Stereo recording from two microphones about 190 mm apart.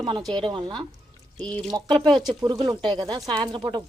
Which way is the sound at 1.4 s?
5° left (ahead or behind).